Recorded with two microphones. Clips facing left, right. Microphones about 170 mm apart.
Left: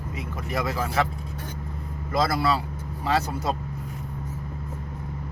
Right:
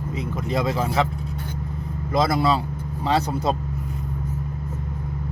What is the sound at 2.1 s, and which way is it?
Speech, 20° right (ahead or behind).